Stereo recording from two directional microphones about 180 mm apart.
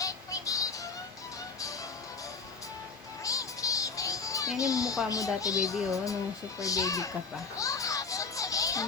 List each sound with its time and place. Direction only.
0.0 s music: 20° left (ahead or behind)
3.2 s music: 20° left (ahead or behind)
4.5 s speech: 20° left (ahead or behind)
7.5 s music: 20° left (ahead or behind)